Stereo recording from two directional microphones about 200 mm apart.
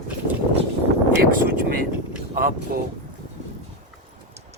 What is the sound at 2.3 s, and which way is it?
Speech, 45° right (ahead or behind).